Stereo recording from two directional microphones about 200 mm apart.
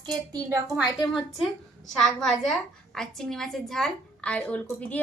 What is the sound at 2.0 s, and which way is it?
A woman's voice, centre (ahead or behind).